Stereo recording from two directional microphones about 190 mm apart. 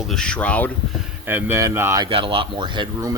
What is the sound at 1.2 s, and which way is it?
Speech, 10° right (ahead or behind).